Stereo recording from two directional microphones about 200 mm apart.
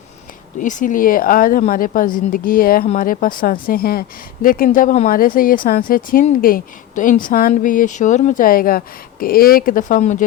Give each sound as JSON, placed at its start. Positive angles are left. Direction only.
{"t": 0.6, "sound": "speech", "side_deg": 40}